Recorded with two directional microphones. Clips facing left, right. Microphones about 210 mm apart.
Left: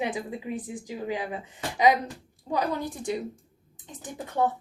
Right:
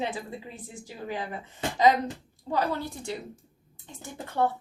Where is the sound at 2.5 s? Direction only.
15° left (ahead or behind).